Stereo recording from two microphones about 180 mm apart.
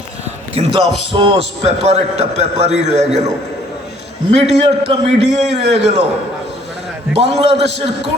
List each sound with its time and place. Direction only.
0.5 s a man's voice: 35° right (ahead or behind)
4.4 s a man's voice: 35° right (ahead or behind)
7.2 s a man's voice: 35° right (ahead or behind)